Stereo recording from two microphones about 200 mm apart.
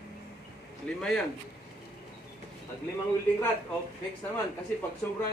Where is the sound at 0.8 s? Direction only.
Centre (ahead or behind).